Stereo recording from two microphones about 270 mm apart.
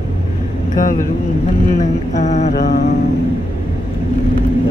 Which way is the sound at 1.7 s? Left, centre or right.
Left.